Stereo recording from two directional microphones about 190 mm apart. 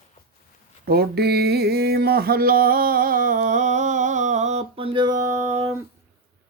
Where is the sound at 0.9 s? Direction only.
55° right (ahead or behind); by 5.8 s 15° right (ahead or behind).